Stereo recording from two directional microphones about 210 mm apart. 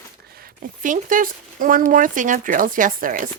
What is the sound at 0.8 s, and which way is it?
Speech, 40° right (ahead or behind).